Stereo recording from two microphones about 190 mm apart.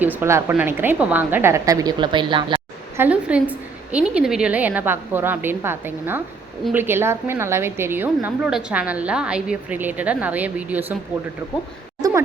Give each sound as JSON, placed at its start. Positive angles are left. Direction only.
{"t": 0.0, "sound": "a woman's voice", "side_deg": -10}
{"t": 3.0, "sound": "a woman's voice", "side_deg": -5}